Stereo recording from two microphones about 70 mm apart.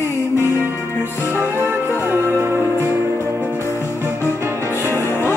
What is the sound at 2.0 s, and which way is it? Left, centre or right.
Music, right.